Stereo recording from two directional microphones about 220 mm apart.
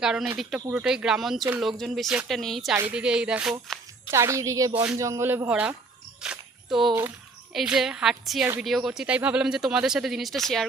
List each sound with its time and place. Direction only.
0.0 s a woman's voice: centre (ahead or behind)
6.2 s a sound: 5° right (ahead or behind)
7.5 s speech: centre (ahead or behind)